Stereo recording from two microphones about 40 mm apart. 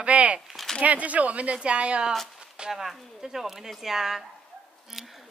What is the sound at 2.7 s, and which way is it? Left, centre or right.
A man's voice, centre.